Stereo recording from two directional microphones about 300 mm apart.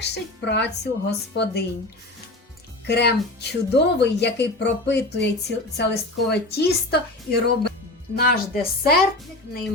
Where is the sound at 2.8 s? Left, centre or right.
Left.